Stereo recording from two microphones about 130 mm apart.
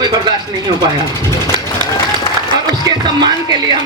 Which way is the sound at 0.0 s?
30° right (ahead or behind).